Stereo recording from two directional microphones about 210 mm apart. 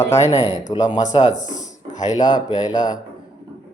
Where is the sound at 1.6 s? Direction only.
35° left (ahead or behind).